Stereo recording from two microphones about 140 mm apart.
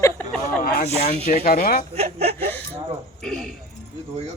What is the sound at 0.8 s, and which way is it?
Speech, 50° left (ahead or behind).